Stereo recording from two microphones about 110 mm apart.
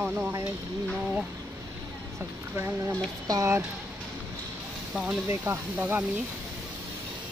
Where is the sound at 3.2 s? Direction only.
30° right (ahead or behind).